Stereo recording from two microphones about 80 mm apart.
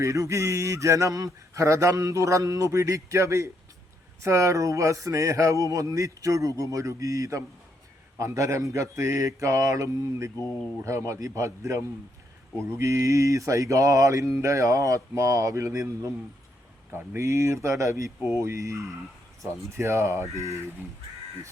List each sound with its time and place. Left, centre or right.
0.0 s speech: right
16.9 s speech: right